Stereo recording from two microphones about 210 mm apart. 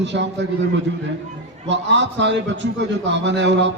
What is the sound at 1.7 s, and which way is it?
A man's voice, 55° right (ahead or behind).